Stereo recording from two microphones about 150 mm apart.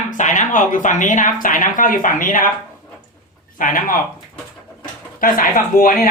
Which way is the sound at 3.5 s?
65° left (ahead or behind).